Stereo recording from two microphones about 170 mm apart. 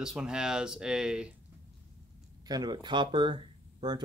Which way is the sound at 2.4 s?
25° right (ahead or behind).